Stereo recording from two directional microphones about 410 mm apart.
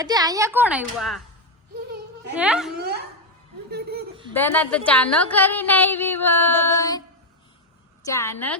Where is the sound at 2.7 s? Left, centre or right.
Right.